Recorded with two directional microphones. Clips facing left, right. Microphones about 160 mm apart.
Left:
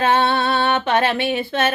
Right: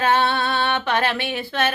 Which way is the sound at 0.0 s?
20° left (ahead or behind).